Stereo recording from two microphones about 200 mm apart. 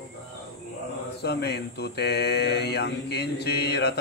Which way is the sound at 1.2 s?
55° left (ahead or behind).